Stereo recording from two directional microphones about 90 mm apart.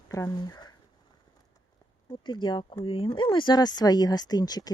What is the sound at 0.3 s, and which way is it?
Speech, 50° left (ahead or behind).